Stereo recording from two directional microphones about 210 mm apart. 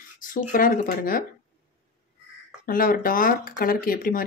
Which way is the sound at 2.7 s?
45° left (ahead or behind).